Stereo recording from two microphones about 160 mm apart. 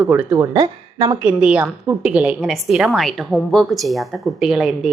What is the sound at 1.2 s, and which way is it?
A woman's voice, 10° right (ahead or behind).